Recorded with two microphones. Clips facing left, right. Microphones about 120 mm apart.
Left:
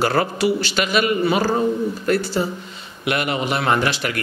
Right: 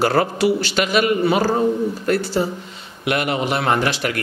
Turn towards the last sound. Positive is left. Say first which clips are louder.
# right 1 dB
turn(degrees=-50)  # may be behind; listen again after turning